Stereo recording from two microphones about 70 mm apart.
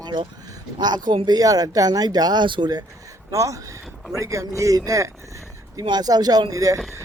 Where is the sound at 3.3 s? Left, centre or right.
Right.